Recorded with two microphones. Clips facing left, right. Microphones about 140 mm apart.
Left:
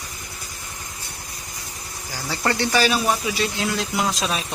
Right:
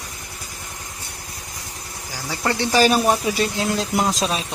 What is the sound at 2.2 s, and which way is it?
Speech, 10° right (ahead or behind).